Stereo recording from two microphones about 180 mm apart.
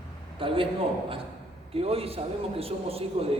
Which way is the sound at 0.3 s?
30° right (ahead or behind).